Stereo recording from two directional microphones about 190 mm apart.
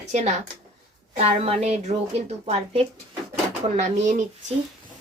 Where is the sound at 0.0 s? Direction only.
35° right (ahead or behind).